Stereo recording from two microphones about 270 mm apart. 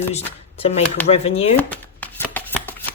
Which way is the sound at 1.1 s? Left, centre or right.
Left.